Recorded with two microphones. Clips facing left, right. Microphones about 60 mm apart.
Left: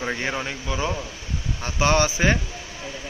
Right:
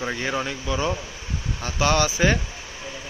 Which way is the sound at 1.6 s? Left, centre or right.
Left.